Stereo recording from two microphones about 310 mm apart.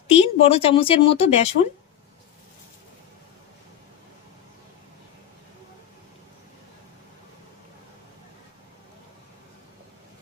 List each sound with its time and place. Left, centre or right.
0.1 s speech: centre